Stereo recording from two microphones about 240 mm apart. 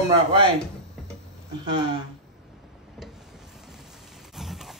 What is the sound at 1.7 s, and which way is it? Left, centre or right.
Speech, right.